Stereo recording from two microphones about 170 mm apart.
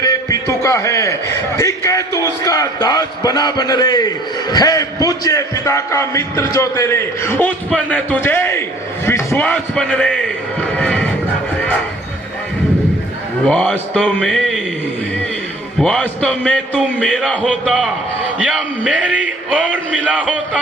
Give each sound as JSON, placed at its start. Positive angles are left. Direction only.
{"t": 0.0, "sound": "a man's voice", "side_deg": 20}
{"t": 10.8, "sound": "music", "side_deg": 10}
{"t": 13.4, "sound": "a man's voice", "side_deg": 5}
{"t": 15.8, "sound": "a man's voice", "side_deg": 5}
{"t": 18.3, "sound": "a sound", "side_deg": -5}
{"t": 18.9, "sound": "music", "side_deg": -10}
{"t": 20.1, "sound": "a man's voice", "side_deg": -10}